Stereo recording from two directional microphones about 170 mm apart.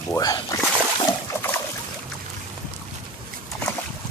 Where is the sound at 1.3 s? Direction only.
10° left (ahead or behind).